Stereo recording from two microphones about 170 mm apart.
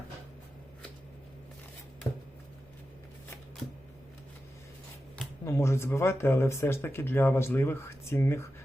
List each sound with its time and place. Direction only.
2.0 s chopping: 20° left (ahead or behind)
5.1 s speech: 15° left (ahead or behind)